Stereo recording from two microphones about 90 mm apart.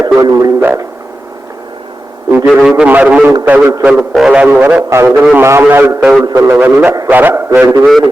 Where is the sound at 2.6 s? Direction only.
10° right (ahead or behind).